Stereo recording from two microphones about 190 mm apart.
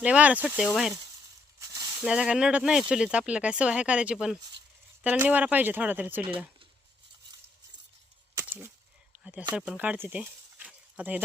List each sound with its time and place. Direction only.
0.0 s speech: 5° right (ahead or behind)
1.5 s sizzle: 20° right (ahead or behind)
2.0 s speech: 5° right (ahead or behind)
8.4 s a sound: 10° right (ahead or behind)
9.1 s speech: 5° right (ahead or behind)